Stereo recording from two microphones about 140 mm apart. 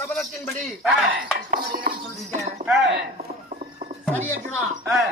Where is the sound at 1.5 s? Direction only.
90° right.